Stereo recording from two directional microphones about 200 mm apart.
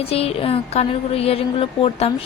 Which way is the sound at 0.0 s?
30° left (ahead or behind).